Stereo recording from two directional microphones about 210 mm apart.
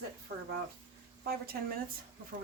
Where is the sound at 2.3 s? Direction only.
50° right (ahead or behind).